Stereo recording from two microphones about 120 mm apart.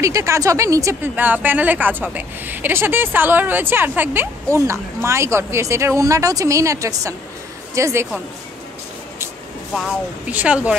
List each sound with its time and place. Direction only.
0.0 s speech: 25° right (ahead or behind)
1.0 s speech: 15° right (ahead or behind)
10.2 s speech: 10° right (ahead or behind)